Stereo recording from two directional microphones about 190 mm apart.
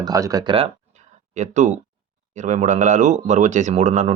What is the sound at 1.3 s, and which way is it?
Speech, 40° right (ahead or behind).